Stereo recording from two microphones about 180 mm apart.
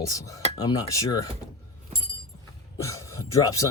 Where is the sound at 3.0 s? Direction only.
20° left (ahead or behind).